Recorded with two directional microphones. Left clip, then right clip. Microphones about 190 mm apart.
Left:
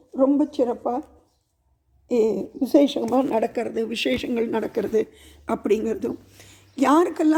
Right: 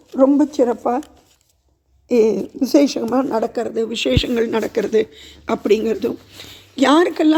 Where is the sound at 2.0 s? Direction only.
10° right (ahead or behind).